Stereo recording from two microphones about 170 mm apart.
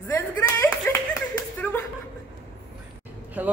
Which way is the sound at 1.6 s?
10° left (ahead or behind).